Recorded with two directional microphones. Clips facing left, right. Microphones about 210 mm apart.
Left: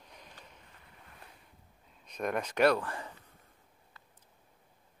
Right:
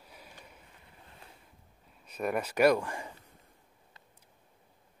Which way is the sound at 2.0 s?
5° right (ahead or behind).